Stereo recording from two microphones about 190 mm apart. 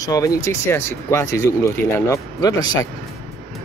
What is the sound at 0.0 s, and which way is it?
Speech, 20° left (ahead or behind).